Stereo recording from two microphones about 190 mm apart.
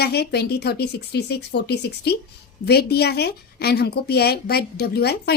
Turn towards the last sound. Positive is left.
turn(degrees=55)  # may be behind; listen again after turning